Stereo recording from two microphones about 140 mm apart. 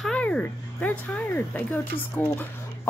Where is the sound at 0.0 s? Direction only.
5° left (ahead or behind).